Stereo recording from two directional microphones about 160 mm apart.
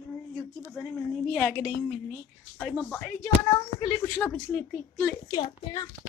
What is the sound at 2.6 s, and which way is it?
Speech, 10° left (ahead or behind).